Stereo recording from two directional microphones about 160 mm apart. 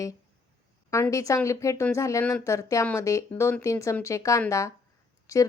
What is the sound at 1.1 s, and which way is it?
Speech, 20° left (ahead or behind).